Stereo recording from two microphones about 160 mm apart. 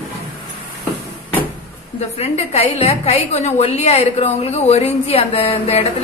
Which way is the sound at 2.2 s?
40° left (ahead or behind).